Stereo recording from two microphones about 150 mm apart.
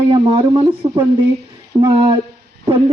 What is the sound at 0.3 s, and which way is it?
A woman's voice, 35° right (ahead or behind).